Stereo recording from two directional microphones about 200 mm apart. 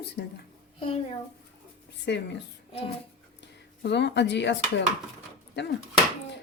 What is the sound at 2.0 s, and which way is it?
Speech, 55° left (ahead or behind).